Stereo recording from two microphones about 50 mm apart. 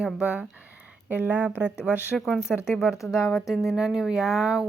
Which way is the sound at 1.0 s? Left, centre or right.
Right.